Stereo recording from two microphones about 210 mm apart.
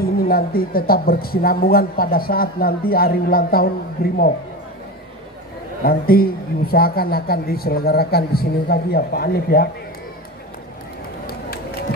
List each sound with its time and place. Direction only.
0.0 s speech: 45° left (ahead or behind)
5.9 s speech: 45° left (ahead or behind)